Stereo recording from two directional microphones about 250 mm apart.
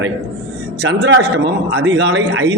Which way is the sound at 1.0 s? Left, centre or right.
Right.